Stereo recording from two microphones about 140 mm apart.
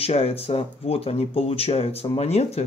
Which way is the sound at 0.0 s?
45° left (ahead or behind).